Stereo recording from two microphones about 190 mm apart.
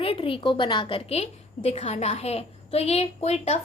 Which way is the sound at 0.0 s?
30° left (ahead or behind).